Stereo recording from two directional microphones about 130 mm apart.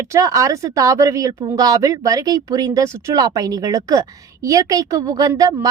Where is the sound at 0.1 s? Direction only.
25° right (ahead or behind).